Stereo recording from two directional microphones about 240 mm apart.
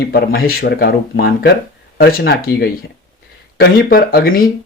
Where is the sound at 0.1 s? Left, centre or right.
Left.